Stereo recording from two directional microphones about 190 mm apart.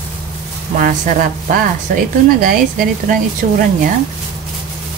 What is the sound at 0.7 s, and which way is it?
Speech, 50° right (ahead or behind).